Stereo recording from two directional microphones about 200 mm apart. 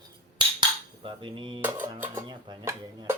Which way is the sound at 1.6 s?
10° right (ahead or behind).